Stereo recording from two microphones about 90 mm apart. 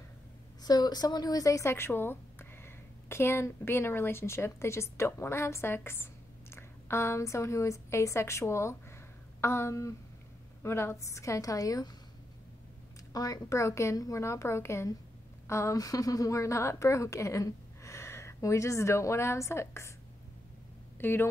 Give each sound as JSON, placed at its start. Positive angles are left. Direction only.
{"t": 0.6, "sound": "a woman's voice", "side_deg": 50}
{"t": 13.1, "sound": "a woman's voice", "side_deg": 45}
{"t": 21.0, "sound": "speech", "side_deg": 25}